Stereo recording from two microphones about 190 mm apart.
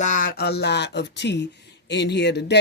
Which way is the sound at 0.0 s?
45° left (ahead or behind).